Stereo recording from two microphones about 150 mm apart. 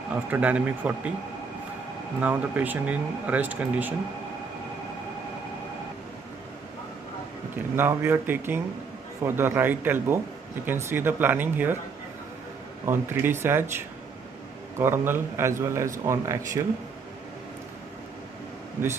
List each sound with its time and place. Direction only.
0.1 s speech: 10° right (ahead or behind)
2.1 s speech: 10° right (ahead or behind)
7.7 s speech: 15° right (ahead or behind)
12.8 s speech: 15° right (ahead or behind)
14.8 s speech: 15° right (ahead or behind)